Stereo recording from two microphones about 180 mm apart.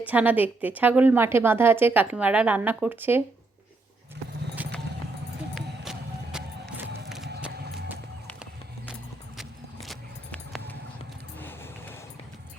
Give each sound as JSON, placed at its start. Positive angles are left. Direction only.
{"t": 0.0, "sound": "a woman's voice", "side_deg": -10}
{"t": 4.6, "sound": "clip-clop", "side_deg": -10}
{"t": 5.5, "sound": "music", "side_deg": -5}
{"t": 9.4, "sound": "horse", "side_deg": 0}
{"t": 11.3, "sound": "a sound", "side_deg": 10}